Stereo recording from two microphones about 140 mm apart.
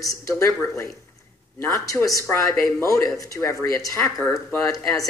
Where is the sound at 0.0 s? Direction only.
25° left (ahead or behind).